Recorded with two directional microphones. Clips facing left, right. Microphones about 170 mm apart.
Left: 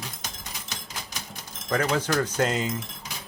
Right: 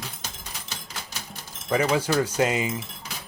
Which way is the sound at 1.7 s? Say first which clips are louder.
Right 2 dB; 10° right (ahead or behind).